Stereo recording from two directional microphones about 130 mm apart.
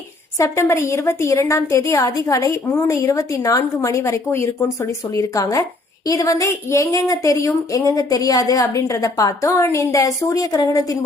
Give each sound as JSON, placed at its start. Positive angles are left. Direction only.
{"t": 0.3, "sound": "a woman's voice", "side_deg": 25}